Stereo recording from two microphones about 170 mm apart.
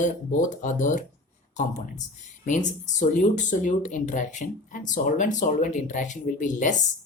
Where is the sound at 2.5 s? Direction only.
45° left (ahead or behind).